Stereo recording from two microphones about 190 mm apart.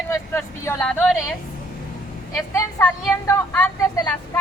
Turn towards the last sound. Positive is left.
turn(degrees=15)  # may be behind; listen again after turning